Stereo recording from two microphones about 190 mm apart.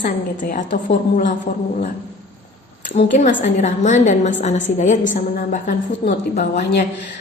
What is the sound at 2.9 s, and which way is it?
A woman's voice, 40° left (ahead or behind).